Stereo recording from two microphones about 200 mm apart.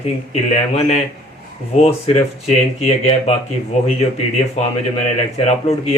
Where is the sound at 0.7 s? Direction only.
30° left (ahead or behind).